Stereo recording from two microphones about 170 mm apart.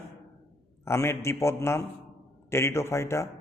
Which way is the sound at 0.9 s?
15° left (ahead or behind).